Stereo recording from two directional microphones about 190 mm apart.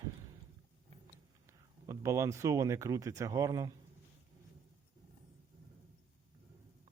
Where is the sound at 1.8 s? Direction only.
15° right (ahead or behind).